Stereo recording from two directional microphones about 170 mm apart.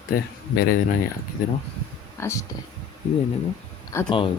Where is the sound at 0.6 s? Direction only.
60° left (ahead or behind).